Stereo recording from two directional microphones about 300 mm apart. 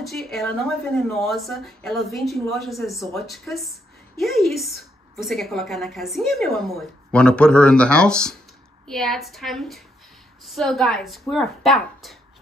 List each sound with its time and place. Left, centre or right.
0.0 s a woman's voice: centre